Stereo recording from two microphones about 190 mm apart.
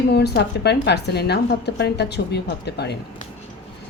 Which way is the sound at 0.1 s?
60° left (ahead or behind).